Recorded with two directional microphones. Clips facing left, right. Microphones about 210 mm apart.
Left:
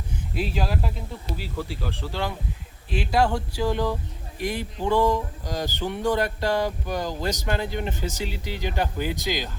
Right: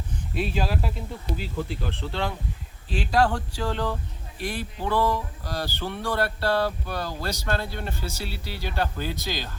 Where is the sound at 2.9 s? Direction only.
10° left (ahead or behind).